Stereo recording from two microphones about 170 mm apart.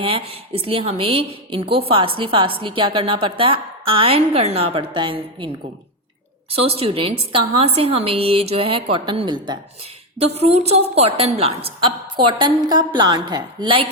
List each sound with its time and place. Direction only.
0.0 s a woman's voice: 35° right (ahead or behind)
6.5 s a woman's voice: 35° right (ahead or behind)